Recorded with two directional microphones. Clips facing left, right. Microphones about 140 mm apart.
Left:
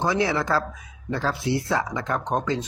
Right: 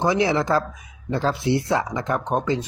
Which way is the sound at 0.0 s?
15° right (ahead or behind).